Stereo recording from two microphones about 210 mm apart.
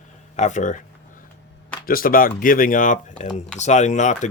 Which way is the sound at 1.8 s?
45° left (ahead or behind).